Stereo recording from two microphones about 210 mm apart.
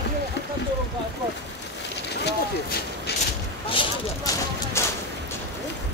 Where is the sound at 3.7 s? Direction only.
25° left (ahead or behind).